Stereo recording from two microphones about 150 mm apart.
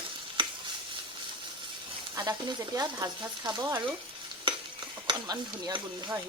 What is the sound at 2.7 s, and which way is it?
Speech, 25° right (ahead or behind).